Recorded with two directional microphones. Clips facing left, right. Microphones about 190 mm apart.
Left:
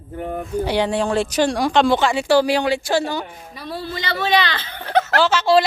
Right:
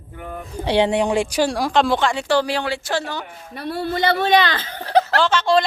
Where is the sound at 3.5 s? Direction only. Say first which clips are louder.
Right 5 dB; 60° right (ahead or behind); by 5.1 s 35° right (ahead or behind).